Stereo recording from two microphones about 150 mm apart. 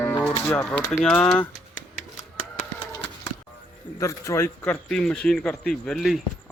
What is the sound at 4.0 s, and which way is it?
Speech, 20° left (ahead or behind).